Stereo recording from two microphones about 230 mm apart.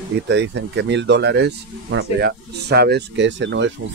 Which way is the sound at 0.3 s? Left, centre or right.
Right.